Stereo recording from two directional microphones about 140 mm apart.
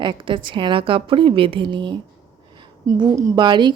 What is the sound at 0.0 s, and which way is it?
A woman's voice, 35° right (ahead or behind).